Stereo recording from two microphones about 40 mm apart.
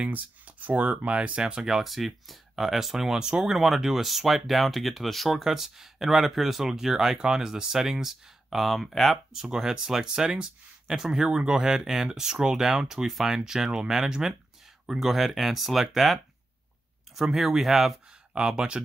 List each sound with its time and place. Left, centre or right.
0.1 s speech: right
1.6 s speech: centre
3.5 s speech: centre
9.3 s speech: centre
18.3 s speech: centre